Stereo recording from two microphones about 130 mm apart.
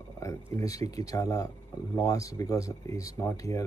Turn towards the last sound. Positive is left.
turn(degrees=25)  # may be behind; listen again after turning